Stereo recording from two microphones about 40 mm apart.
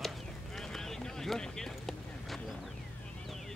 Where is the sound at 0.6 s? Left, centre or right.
Centre.